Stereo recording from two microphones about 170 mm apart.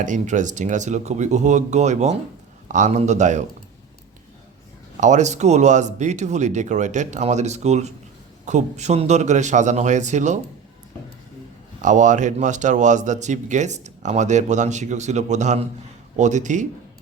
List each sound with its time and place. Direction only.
0.0 s speech: 45° right (ahead or behind)
4.9 s speech: 45° right (ahead or behind)
11.8 s speech: 45° right (ahead or behind)